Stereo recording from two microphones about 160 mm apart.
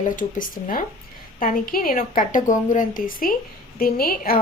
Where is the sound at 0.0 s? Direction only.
55° left (ahead or behind).